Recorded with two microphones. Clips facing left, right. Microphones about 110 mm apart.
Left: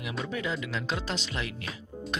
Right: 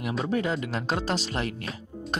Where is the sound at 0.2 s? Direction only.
45° right (ahead or behind).